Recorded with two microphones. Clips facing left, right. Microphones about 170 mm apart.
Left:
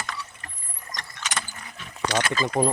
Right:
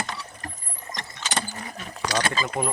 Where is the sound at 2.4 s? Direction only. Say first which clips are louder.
Left 5 dB; 35° left (ahead or behind).